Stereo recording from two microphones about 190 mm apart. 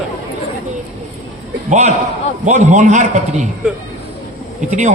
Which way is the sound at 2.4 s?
40° right (ahead or behind).